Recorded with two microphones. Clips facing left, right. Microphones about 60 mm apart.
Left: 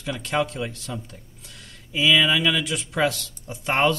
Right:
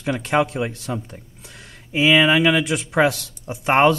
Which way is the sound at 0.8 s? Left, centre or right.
Right.